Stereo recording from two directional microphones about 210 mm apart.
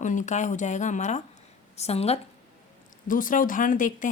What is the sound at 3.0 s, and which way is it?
Speech, 40° left (ahead or behind).